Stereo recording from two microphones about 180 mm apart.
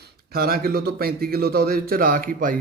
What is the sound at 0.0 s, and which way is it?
Speech, 55° right (ahead or behind).